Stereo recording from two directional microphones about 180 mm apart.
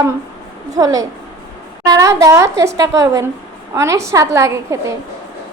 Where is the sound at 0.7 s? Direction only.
20° right (ahead or behind).